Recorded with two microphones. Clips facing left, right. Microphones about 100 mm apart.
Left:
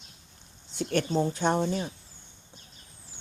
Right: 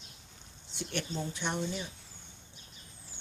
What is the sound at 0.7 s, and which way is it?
Speech, 45° left (ahead or behind).